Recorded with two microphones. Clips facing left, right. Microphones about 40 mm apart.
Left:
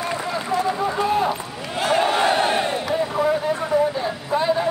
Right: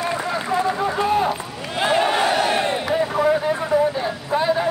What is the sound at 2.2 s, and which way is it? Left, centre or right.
Battle cry, centre.